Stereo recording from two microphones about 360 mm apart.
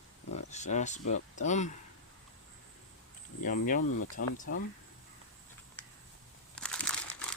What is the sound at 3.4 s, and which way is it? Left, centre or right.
Speech, left.